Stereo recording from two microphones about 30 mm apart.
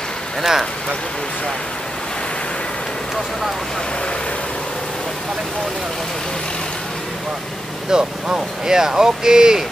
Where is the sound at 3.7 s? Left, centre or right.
Left.